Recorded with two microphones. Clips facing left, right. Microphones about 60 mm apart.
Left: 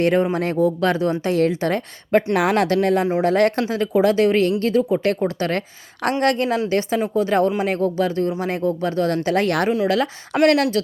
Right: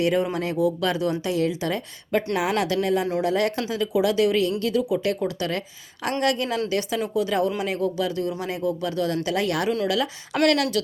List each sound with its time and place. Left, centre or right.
0.0 s a woman's voice: left